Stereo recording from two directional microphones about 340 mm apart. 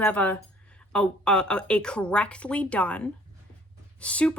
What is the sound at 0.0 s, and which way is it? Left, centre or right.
Speech, centre.